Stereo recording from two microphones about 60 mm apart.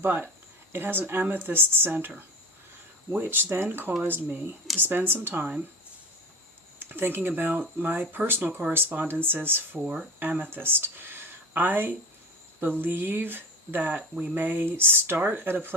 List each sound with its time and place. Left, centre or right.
0.0 s speech: right
6.7 s speech: right
8.4 s speech: centre
9.0 s speech: right
9.7 s speech: centre
10.5 s speech: right